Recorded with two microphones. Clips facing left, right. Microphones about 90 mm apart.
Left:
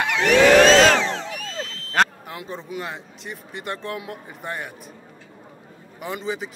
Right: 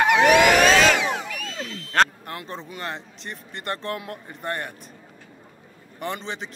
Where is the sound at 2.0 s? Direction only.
Centre (ahead or behind).